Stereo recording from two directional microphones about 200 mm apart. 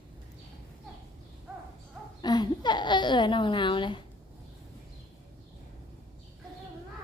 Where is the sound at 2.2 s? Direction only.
20° left (ahead or behind).